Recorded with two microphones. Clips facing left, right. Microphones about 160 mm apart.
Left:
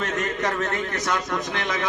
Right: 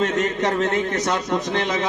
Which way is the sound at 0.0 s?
25° right (ahead or behind).